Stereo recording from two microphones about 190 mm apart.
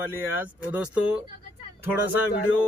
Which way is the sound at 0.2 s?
10° right (ahead or behind).